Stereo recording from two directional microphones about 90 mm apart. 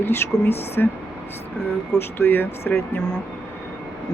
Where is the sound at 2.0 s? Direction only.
25° left (ahead or behind).